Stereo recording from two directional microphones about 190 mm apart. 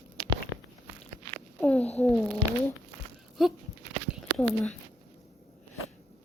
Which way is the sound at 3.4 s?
Centre (ahead or behind).